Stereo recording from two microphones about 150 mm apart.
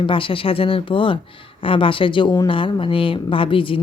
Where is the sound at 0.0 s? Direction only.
35° left (ahead or behind).